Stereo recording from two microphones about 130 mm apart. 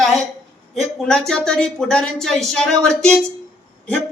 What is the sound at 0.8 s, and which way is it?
Speech, centre (ahead or behind).